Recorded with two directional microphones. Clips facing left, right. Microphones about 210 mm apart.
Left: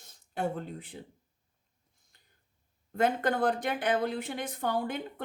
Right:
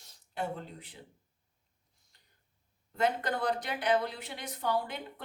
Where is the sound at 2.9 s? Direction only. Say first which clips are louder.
Left 4 dB; 50° left (ahead or behind).